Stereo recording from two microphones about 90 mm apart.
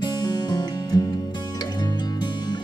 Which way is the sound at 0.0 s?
55° left (ahead or behind).